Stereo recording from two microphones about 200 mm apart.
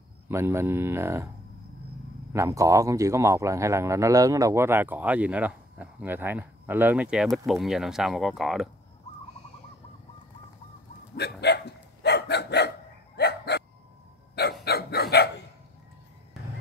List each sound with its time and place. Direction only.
0.3 s speech: 15° right (ahead or behind)
2.3 s speech: 15° right (ahead or behind)
11.1 s dog: 55° left (ahead or behind)
14.6 s dog: 55° left (ahead or behind)